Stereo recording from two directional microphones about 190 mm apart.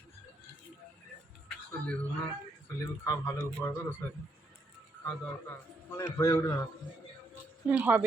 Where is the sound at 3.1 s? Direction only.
10° left (ahead or behind).